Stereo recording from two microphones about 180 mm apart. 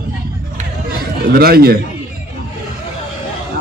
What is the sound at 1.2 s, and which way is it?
Speech, 60° right (ahead or behind).